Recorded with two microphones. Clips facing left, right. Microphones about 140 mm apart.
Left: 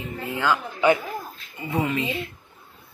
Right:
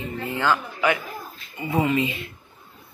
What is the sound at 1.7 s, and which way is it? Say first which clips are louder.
Speech: right 3 dB; 5° right (ahead or behind).